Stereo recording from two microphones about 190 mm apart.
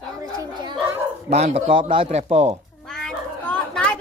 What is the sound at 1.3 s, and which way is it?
A man's voice, 35° right (ahead or behind).